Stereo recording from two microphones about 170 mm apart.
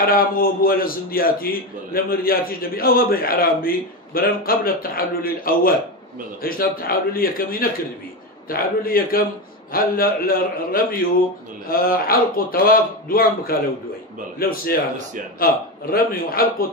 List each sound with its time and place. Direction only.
0.0 s a man's voice: 60° left (ahead or behind)